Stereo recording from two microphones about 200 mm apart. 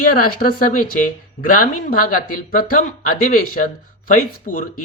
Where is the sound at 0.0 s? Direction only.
45° left (ahead or behind).